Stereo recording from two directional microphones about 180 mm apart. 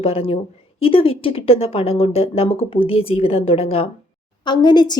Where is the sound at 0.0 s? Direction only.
35° left (ahead or behind).